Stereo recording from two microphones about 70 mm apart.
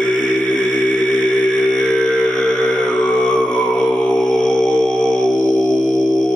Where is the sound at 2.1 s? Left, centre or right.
Centre.